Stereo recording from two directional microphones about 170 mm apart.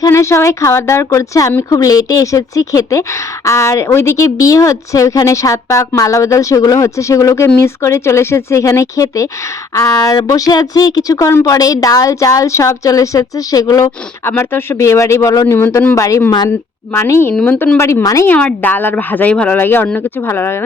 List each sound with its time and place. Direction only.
0.0 s speech: 15° left (ahead or behind)
18.3 s speech: 10° left (ahead or behind)